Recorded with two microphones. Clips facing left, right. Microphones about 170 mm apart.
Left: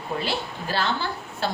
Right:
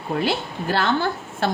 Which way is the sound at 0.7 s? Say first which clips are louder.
Right 5 dB; 50° right (ahead or behind).